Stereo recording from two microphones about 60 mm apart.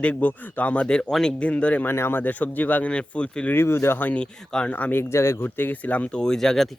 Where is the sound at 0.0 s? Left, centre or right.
Left.